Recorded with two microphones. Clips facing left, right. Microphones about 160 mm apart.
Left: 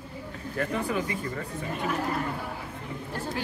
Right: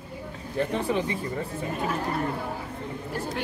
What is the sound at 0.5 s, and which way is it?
Speech, 25° right (ahead or behind).